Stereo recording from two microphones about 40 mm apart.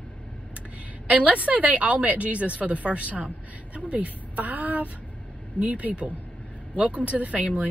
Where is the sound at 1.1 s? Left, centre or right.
Right.